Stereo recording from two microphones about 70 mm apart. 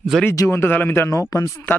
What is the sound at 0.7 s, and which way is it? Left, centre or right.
Speech, left.